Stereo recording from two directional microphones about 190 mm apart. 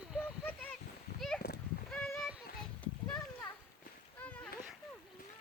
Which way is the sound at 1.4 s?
55° left (ahead or behind).